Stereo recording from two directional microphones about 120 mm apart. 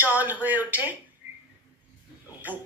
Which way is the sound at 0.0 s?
15° right (ahead or behind).